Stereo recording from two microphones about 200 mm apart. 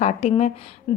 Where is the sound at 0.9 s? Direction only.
25° left (ahead or behind).